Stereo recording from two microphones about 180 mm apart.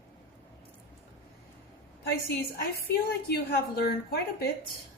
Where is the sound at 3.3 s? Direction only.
60° left (ahead or behind).